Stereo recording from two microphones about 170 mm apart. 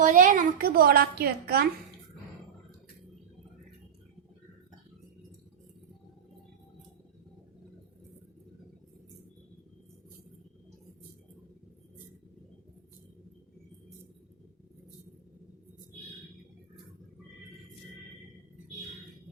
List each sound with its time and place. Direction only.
0.0 s a woman's voice: 50° right (ahead or behind); by 1.6 s 65° right (ahead or behind)